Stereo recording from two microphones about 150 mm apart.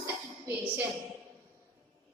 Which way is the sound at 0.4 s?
15° right (ahead or behind).